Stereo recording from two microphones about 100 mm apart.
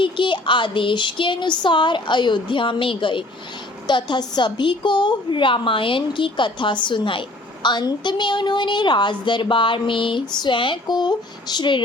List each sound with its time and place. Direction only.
0.0 s a woman's voice: 55° left (ahead or behind)